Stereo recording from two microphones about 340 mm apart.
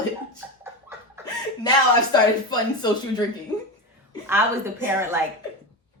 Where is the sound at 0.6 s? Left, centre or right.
Centre.